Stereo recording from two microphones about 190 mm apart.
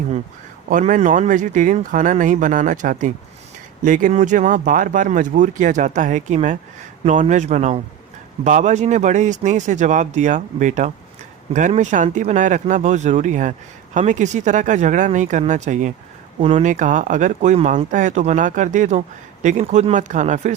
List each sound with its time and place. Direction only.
0.7 s speech: 40° right (ahead or behind)